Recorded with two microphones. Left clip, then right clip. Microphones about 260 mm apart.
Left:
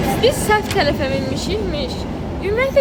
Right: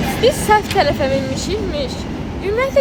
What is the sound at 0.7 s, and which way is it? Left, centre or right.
A woman's voice, centre.